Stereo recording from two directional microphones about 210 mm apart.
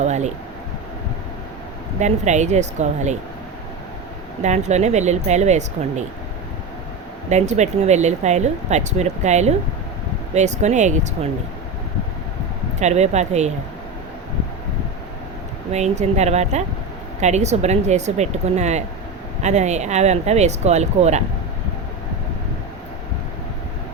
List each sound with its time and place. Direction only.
0.0 s a sound: 35° right (ahead or behind)
2.0 s speech: 35° right (ahead or behind)
4.4 s speech: 35° right (ahead or behind)
7.3 s speech: 35° right (ahead or behind)
12.8 s speech: 35° right (ahead or behind)
15.7 s speech: 30° right (ahead or behind)